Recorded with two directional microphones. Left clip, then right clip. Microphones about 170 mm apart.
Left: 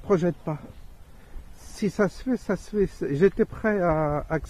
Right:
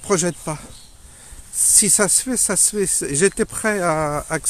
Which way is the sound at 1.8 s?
20° right (ahead or behind).